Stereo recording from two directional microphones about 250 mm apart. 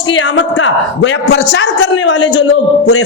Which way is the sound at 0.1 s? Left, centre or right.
Left.